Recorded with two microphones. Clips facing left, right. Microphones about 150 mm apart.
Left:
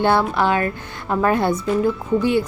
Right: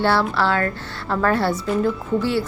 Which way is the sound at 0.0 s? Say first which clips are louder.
Left 2 dB; 15° left (ahead or behind).